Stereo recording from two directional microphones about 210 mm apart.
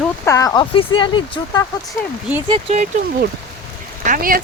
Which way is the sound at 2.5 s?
30° right (ahead or behind).